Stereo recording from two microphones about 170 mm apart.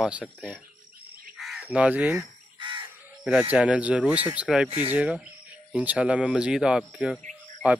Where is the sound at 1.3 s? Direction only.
Centre (ahead or behind).